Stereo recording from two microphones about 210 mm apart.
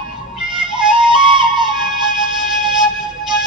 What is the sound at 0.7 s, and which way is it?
Flute, 25° right (ahead or behind).